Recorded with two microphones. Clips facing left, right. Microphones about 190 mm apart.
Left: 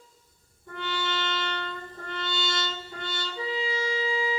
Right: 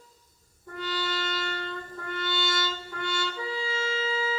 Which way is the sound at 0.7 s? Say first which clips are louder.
Even; 40° right (ahead or behind).